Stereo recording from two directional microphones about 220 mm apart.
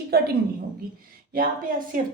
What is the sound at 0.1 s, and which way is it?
Speech, 45° right (ahead or behind).